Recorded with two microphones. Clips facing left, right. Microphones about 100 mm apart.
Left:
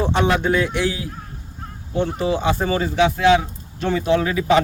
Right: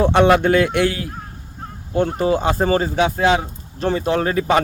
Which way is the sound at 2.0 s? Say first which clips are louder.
Right 3 dB; 45° right (ahead or behind).